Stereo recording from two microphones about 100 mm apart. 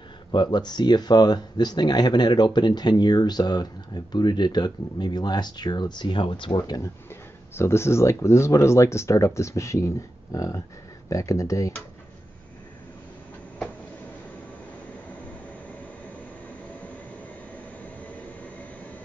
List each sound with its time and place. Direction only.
0.3 s speech: 50° left (ahead or behind)
7.5 s speech: 25° left (ahead or behind)